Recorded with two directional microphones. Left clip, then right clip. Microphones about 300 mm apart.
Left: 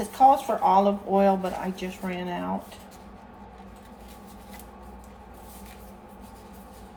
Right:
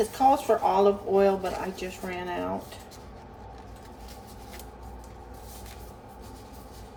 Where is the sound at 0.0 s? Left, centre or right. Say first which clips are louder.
Left 3 dB; centre.